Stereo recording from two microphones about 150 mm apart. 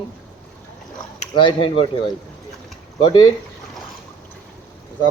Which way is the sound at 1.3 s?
35° left (ahead or behind).